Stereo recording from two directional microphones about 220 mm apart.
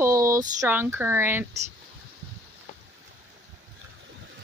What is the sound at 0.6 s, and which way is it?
Speech, 10° right (ahead or behind).